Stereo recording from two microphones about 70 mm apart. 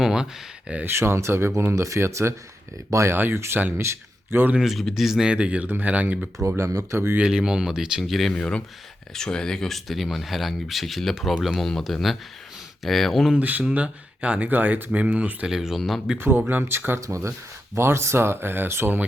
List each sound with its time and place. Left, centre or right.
0.0 s a sound: centre
0.9 s a man's voice: right
4.5 s speech: centre
5.3 s speech: centre
6.6 s speech: right
7.2 s speech: centre
8.3 s speech: centre
13.3 s speech: right
15.4 s speech: centre
16.1 s speech: right
17.0 s speech: right
17.7 s speech: right